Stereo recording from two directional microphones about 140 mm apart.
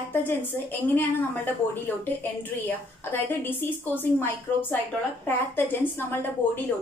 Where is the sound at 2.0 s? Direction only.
15° left (ahead or behind).